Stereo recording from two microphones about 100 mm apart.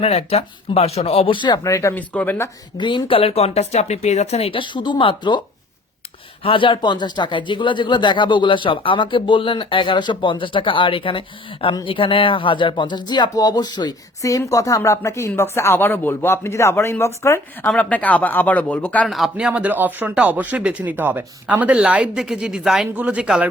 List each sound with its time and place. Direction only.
0.0 s speech: 90° left
1.4 s speech: 45° left (ahead or behind)
1.6 s speech: 30° left (ahead or behind)
2.0 s speech: 15° left (ahead or behind)
2.7 s speech: 50° left (ahead or behind); by 4.6 s 85° left
4.6 s speech: 50° left (ahead or behind)
6.4 s speech: 60° left (ahead or behind); by 17.7 s 25° left (ahead or behind)
17.7 s speech: 15° left (ahead or behind)
19.0 s speech: centre (ahead or behind)